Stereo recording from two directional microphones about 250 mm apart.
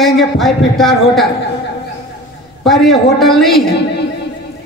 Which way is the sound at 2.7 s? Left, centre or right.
Centre.